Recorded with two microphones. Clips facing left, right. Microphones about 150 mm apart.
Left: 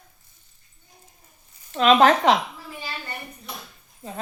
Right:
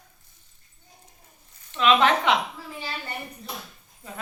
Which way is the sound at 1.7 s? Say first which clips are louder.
Left 4 dB; 40° left (ahead or behind).